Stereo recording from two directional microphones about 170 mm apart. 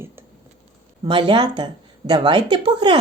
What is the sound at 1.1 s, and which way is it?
Speech, 25° right (ahead or behind).